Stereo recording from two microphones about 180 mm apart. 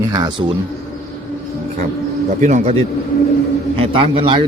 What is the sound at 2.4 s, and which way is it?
A man's voice, 40° right (ahead or behind).